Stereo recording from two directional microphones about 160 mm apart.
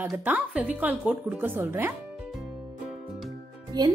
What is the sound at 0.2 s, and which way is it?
A woman's voice, 10° right (ahead or behind).